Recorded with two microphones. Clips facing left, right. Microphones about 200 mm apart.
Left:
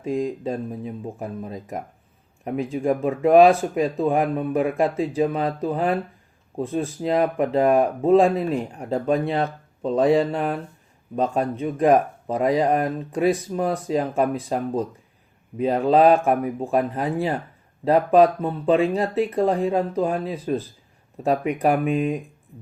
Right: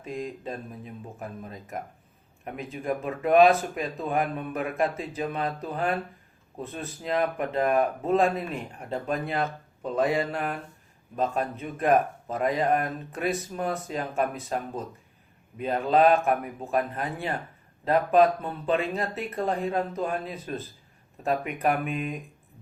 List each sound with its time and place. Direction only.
0.0 s speech: 30° left (ahead or behind)